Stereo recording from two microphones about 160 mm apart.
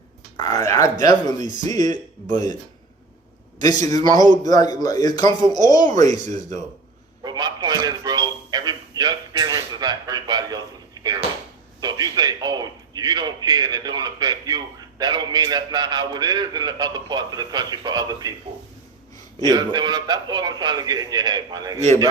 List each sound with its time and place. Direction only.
0.3 s speech: 20° left (ahead or behind)
3.6 s speech: 25° left (ahead or behind)
5.7 s speech: 50° right (ahead or behind)
7.2 s a man's voice: 25° right (ahead or behind)
19.5 s a man's voice: 25° right (ahead or behind)
21.8 s a man's voice: 20° left (ahead or behind)